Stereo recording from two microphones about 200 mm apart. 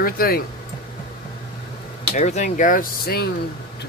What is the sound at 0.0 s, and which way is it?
Speech, 50° left (ahead or behind).